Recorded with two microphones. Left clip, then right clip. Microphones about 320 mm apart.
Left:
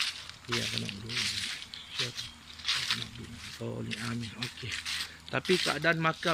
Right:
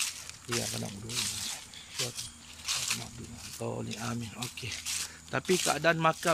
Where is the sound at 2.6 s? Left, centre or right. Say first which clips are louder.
Left 3 dB; centre.